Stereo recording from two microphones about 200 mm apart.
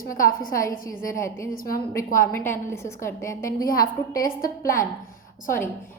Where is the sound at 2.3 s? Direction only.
10° left (ahead or behind).